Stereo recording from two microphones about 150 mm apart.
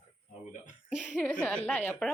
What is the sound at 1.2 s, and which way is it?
Speech, 10° left (ahead or behind).